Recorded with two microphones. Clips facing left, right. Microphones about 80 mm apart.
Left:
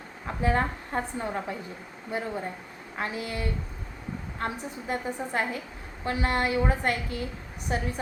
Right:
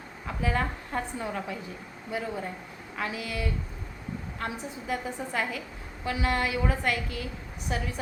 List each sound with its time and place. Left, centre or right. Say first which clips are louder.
0.3 s a woman's voice: left 3 dB; left